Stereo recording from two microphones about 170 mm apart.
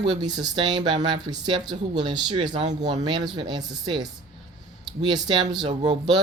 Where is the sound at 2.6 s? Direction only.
45° right (ahead or behind).